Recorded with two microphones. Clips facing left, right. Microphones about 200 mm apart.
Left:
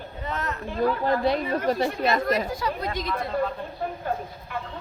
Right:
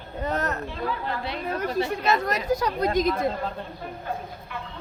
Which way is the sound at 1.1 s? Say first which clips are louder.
Left 7 dB; 40° left (ahead or behind).